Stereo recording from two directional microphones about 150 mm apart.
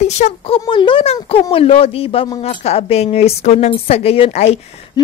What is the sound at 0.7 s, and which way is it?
Speech, 35° left (ahead or behind).